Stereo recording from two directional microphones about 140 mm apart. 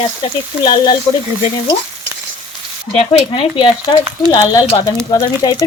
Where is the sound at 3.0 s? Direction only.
45° left (ahead or behind).